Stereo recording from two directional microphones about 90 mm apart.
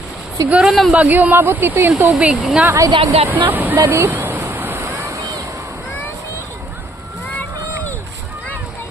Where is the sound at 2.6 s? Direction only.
35° right (ahead or behind).